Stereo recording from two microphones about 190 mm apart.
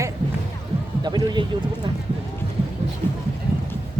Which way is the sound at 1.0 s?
20° right (ahead or behind).